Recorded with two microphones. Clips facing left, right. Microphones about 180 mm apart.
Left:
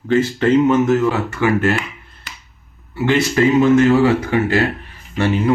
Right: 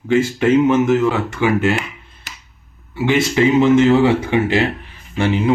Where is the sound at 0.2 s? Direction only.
10° right (ahead or behind).